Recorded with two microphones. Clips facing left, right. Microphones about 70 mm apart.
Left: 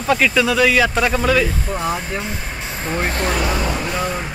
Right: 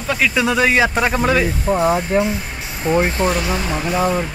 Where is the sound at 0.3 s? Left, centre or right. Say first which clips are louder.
Left 1 dB; right.